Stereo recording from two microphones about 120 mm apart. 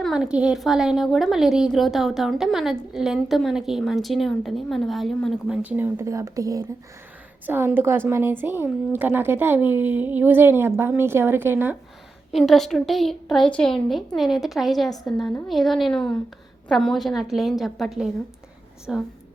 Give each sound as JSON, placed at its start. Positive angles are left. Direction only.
{"t": 0.0, "sound": "a woman's voice", "side_deg": -5}
{"t": 5.5, "sound": "speech", "side_deg": -15}
{"t": 7.4, "sound": "a woman's voice", "side_deg": -15}
{"t": 12.3, "sound": "a woman's voice", "side_deg": 0}